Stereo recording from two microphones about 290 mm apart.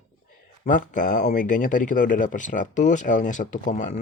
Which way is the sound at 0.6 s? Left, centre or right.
Left.